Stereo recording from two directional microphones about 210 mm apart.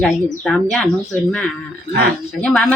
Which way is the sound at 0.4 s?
5° left (ahead or behind).